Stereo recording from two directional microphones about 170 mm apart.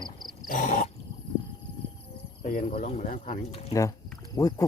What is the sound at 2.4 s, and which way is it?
Speech, 55° left (ahead or behind).